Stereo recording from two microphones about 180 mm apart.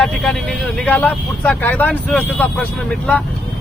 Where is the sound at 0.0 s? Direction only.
Centre (ahead or behind).